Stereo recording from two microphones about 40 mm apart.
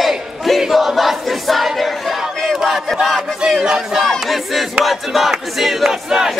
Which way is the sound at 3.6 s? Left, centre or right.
Centre.